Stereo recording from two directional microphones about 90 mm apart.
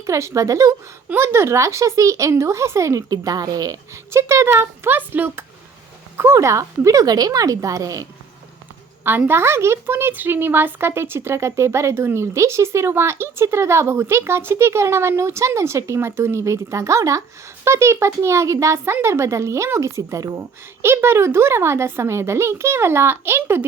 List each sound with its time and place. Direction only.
0.0 s speech: 35° right (ahead or behind)
4.1 s a woman's voice: 30° right (ahead or behind)
9.0 s a woman's voice: 25° right (ahead or behind)